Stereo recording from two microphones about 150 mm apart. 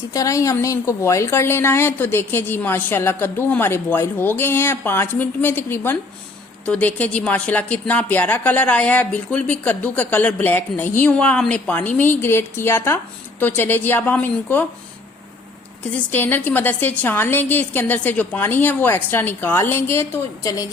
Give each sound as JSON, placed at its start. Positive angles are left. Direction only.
{"t": 0.1, "sound": "a woman's voice", "side_deg": 20}
{"t": 16.1, "sound": "a woman's voice", "side_deg": 15}